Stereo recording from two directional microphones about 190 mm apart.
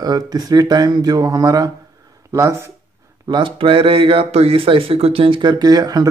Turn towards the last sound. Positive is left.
turn(degrees=-20)  # may be behind; listen again after turning